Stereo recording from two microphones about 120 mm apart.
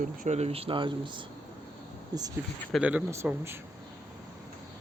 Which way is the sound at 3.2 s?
10° right (ahead or behind).